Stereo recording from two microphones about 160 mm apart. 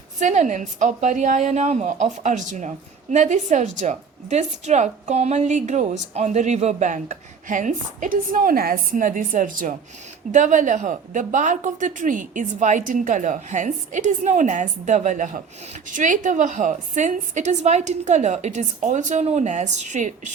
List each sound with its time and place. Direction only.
0.2 s a woman's voice: 50° right (ahead or behind)